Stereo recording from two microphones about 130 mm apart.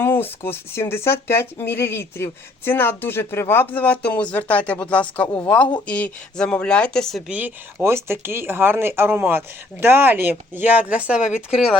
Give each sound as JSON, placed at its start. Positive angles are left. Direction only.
{"t": 0.0, "sound": "speech", "side_deg": 15}
{"t": 7.3, "sound": "speech", "side_deg": -10}